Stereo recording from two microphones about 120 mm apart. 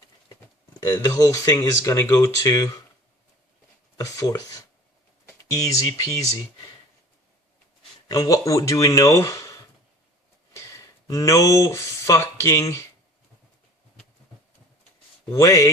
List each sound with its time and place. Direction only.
0.9 s speech: 30° left (ahead or behind)
3.9 s speech: 25° left (ahead or behind)
8.0 s speech: 30° left (ahead or behind)
11.1 s speech: 25° left (ahead or behind)
15.3 s speech: 25° left (ahead or behind)